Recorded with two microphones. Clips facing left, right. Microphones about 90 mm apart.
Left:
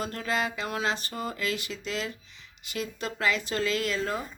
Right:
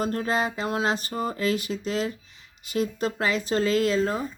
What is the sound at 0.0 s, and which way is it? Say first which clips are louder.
Speech: right 5 dB; 35° right (ahead or behind).